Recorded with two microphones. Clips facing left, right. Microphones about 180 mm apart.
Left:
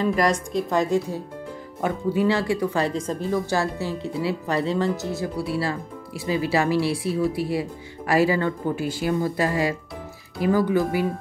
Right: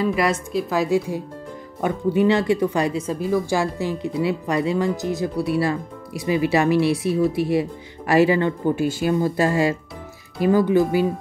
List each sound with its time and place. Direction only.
0.0 s speech: 5° right (ahead or behind)
1.8 s speech: 20° right (ahead or behind)